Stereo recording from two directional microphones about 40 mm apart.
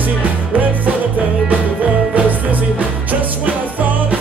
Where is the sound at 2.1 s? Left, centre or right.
Right.